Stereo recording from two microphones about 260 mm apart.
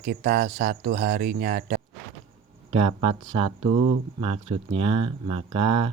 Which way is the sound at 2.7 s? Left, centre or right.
Right.